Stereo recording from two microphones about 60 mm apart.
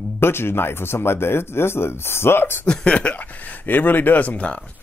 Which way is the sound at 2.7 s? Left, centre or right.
Centre.